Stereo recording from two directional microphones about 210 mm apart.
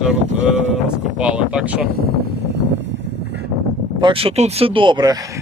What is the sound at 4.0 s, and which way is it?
Speech, 25° right (ahead or behind).